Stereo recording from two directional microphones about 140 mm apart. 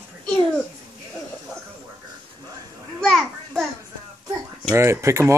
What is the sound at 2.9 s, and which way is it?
Children playing, 5° left (ahead or behind).